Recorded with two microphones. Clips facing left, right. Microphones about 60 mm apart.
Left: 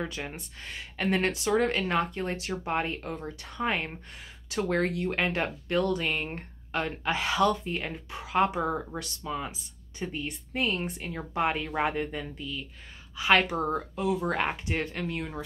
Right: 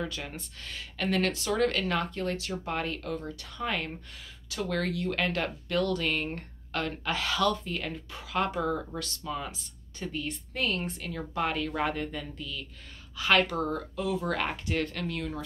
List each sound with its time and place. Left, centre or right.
0.0 s speech: left